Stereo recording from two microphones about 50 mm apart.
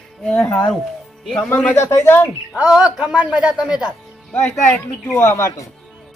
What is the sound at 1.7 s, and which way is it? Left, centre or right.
Speech, left.